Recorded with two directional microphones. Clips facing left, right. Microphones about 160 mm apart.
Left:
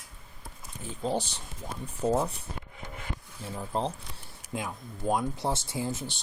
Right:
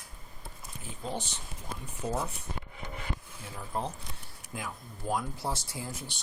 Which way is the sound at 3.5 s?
30° left (ahead or behind).